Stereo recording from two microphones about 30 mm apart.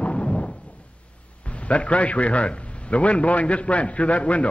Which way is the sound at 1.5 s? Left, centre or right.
Left.